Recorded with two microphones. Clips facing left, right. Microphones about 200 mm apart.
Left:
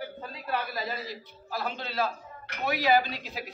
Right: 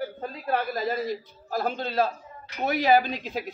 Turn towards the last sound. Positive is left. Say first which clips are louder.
# right 4 dB
turn(degrees=-50)  # may be behind; listen again after turning